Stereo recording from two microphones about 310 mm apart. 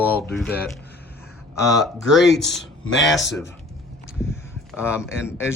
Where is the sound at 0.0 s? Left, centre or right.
Centre.